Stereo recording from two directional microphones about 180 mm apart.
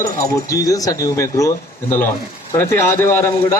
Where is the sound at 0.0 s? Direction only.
15° left (ahead or behind).